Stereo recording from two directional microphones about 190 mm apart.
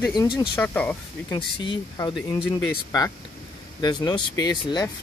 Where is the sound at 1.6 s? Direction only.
25° left (ahead or behind).